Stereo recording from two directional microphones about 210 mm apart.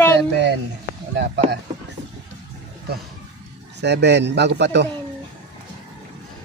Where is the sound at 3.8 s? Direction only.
55° right (ahead or behind).